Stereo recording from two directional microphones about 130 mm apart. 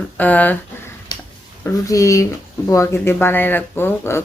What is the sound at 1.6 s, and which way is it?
Speech, 25° left (ahead or behind).